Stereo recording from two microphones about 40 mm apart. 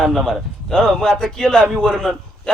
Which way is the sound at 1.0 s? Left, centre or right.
Centre.